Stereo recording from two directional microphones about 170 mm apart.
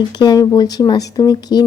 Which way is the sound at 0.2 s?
25° left (ahead or behind).